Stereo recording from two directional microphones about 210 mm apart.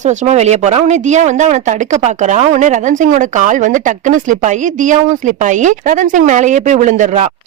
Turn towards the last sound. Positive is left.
turn(degrees=-35)  # may be behind; listen again after turning